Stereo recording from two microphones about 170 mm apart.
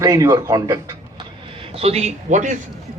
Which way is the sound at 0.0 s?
20° right (ahead or behind).